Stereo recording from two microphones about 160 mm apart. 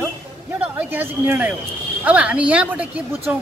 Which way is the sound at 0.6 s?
10° right (ahead or behind).